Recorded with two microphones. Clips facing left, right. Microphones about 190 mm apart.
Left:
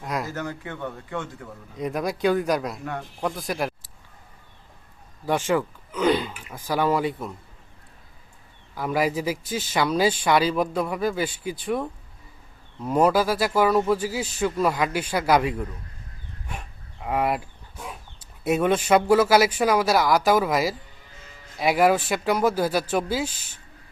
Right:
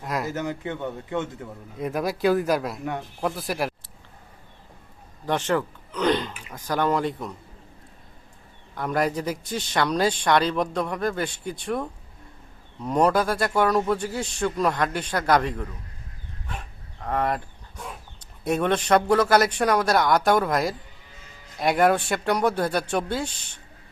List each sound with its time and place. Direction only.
0.0 s a sound: centre (ahead or behind)
0.3 s speech: 20° right (ahead or behind)
1.8 s speech: centre (ahead or behind)
5.2 s speech: 10° left (ahead or behind)
8.7 s speech: 5° left (ahead or behind)
17.0 s speech: 10° left (ahead or behind)